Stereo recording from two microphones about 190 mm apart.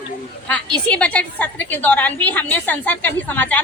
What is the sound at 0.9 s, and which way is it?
A woman's voice, 5° left (ahead or behind).